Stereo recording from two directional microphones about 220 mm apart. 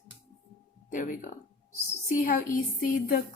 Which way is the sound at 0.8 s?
35° left (ahead or behind).